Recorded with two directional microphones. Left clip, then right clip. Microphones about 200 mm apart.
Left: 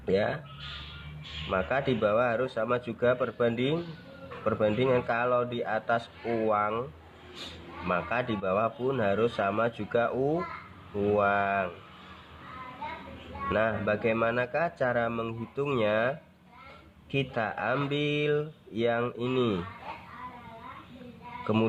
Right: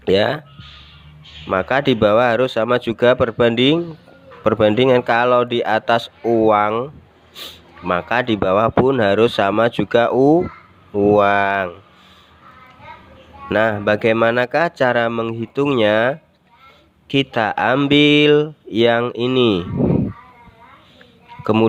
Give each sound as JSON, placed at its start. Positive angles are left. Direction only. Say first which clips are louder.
{"t": 0.0, "sound": "speech", "louder": "right 12 dB", "side_deg": -45}
{"t": 1.5, "sound": "speech", "louder": "right 12 dB", "side_deg": -40}
{"t": 13.5, "sound": "speech", "louder": "right 11 dB", "side_deg": -40}
{"t": 21.4, "sound": "speech", "louder": "right 13 dB", "side_deg": -35}